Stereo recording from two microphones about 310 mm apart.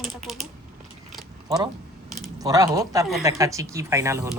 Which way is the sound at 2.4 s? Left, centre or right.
Centre.